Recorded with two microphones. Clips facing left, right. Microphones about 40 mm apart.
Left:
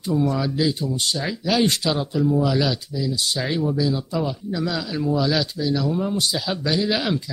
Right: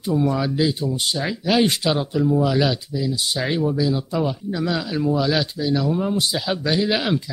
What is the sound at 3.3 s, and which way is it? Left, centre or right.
Speech, centre.